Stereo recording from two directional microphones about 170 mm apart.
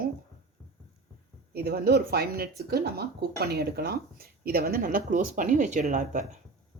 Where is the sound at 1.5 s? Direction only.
65° right (ahead or behind); by 6.2 s 45° right (ahead or behind).